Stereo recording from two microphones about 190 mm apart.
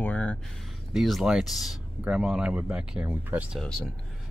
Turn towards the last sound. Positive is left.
turn(degrees=-10)  # may be behind; listen again after turning